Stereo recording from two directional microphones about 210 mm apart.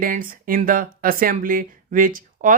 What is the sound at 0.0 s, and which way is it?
Speech, 40° right (ahead or behind).